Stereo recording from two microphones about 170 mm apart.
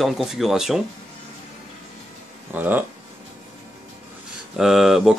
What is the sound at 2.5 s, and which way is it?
Speech, 10° right (ahead or behind).